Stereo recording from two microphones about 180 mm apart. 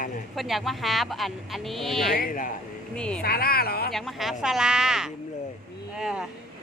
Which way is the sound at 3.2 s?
60° left (ahead or behind).